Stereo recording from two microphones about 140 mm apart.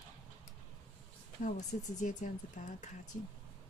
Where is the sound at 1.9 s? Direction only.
65° left (ahead or behind).